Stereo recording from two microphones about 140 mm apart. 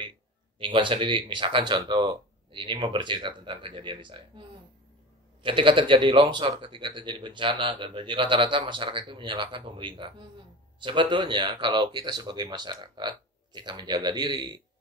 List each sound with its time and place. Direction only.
0.6 s speech: 35° right (ahead or behind)